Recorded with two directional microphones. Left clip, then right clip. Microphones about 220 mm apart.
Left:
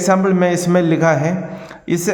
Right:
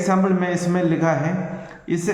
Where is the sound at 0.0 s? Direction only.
50° left (ahead or behind).